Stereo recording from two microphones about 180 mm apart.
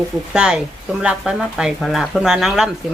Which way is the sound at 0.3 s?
5° right (ahead or behind).